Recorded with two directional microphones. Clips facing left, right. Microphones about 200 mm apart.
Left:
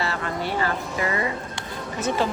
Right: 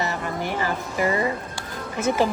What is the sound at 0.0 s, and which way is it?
Music, 15° right (ahead or behind).